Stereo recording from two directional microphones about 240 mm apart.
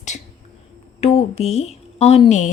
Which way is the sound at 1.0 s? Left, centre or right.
Left.